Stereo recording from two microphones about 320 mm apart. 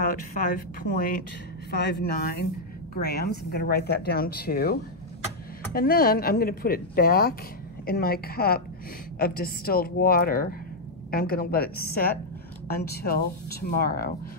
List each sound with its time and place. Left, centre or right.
0.1 s speech: left